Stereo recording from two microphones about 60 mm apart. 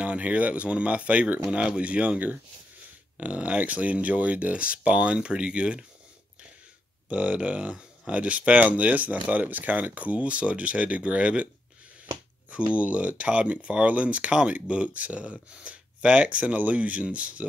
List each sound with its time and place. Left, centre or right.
0.0 s speech: right
7.1 s speech: right
12.4 s speech: right